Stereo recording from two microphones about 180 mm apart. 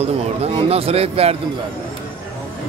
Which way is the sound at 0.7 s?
35° right (ahead or behind).